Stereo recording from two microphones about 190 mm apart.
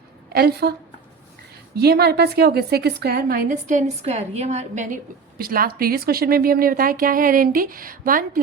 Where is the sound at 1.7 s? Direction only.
55° right (ahead or behind); by 5.0 s 40° right (ahead or behind).